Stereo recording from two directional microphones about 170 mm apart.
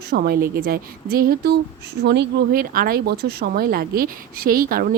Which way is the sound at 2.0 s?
80° right.